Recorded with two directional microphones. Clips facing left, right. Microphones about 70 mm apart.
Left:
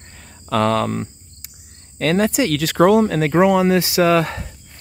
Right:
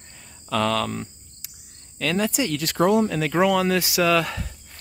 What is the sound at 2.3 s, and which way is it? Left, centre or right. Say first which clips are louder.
Speech: left 6 dB; left.